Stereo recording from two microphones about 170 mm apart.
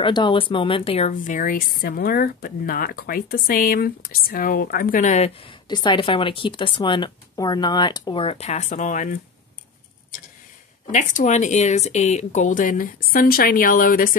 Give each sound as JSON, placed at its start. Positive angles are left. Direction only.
{"t": 0.0, "sound": "a woman's voice", "side_deg": 30}
{"t": 10.9, "sound": "speech", "side_deg": 45}